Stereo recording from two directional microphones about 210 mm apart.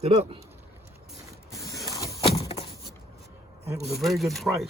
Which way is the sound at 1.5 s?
15° left (ahead or behind).